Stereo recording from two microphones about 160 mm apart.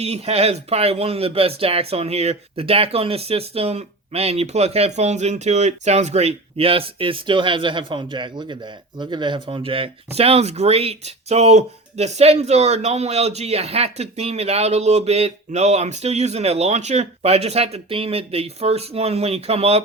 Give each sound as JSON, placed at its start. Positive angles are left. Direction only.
{"t": 0.0, "sound": "speech", "side_deg": -40}